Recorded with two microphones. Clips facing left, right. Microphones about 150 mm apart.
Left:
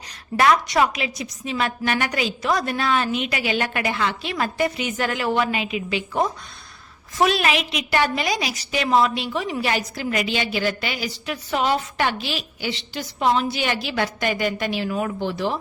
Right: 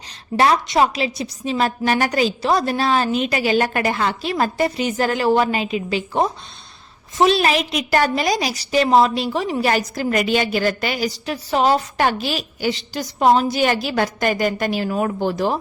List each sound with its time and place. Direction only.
0.3 s a woman's voice: 30° right (ahead or behind)